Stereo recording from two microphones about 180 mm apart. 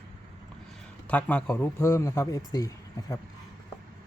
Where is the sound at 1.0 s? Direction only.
10° left (ahead or behind).